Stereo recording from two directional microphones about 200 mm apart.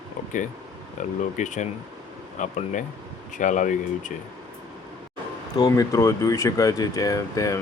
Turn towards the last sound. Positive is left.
turn(degrees=15)  # may be behind; listen again after turning